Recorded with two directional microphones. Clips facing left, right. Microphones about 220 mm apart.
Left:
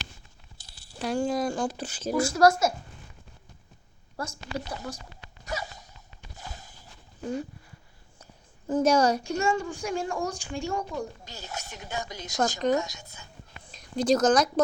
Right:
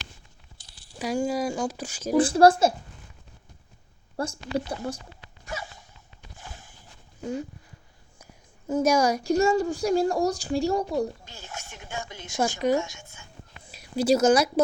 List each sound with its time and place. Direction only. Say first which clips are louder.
0.6 s a sound: even; 10° left (ahead or behind)
0.9 s speech: right 1 dB; 10° right (ahead or behind)
2.1 s speech: right 4 dB; 30° right (ahead or behind)
4.2 s speech: right 6 dB; 30° right (ahead or behind)
5.5 s gasp: left 2 dB; 40° left (ahead or behind)
6.3 s walk: left 2 dB; 40° left (ahead or behind)
8.2 s a sound: right 2 dB; 10° right (ahead or behind)
9.2 s speech: right 6 dB; 35° right (ahead or behind)
11.3 s speech: left 2 dB; 40° left (ahead or behind)
12.5 s speech: right 2 dB; 15° right (ahead or behind)
12.8 s speech: right 1 dB; 40° left (ahead or behind)
13.7 s speech: right 2 dB; 10° right (ahead or behind)